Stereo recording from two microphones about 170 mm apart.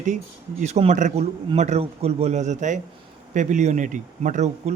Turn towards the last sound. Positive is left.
turn(degrees=-45)  # may be behind; listen again after turning